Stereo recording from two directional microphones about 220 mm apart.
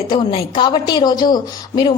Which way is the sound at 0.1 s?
20° left (ahead or behind).